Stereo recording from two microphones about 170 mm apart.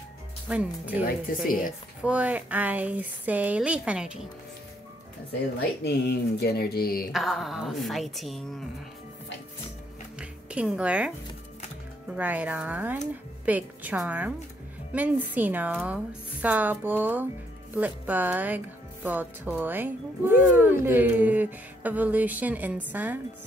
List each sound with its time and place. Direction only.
0.5 s speech: 10° right (ahead or behind)
1.0 s speech: 60° left (ahead or behind)
2.0 s speech: 10° right (ahead or behind)
5.6 s speech: 70° left (ahead or behind)
7.1 s a woman's voice: centre (ahead or behind)
10.1 s music: 5° right (ahead or behind)
12.1 s speech: 10° right (ahead or behind)